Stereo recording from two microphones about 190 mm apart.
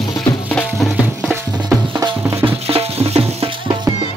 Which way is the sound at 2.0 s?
15° right (ahead or behind).